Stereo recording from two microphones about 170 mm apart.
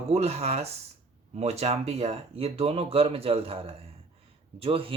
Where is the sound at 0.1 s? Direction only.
40° right (ahead or behind).